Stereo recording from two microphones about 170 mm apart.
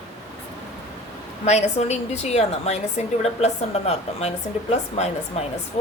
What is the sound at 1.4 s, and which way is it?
A woman's voice, 40° left (ahead or behind).